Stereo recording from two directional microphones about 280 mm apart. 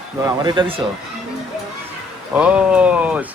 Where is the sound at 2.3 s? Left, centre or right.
Centre.